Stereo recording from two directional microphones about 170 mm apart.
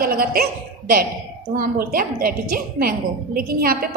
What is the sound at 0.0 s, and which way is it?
A man's voice, 60° right (ahead or behind).